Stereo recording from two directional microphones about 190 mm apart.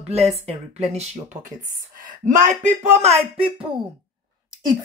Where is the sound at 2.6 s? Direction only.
35° right (ahead or behind).